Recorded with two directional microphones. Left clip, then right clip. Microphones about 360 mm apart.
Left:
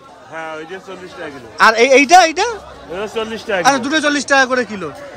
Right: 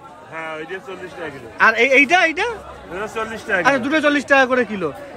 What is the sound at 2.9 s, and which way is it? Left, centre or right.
Speech, left.